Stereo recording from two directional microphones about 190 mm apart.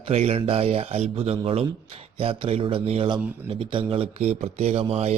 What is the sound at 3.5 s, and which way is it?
A man's voice, 25° right (ahead or behind).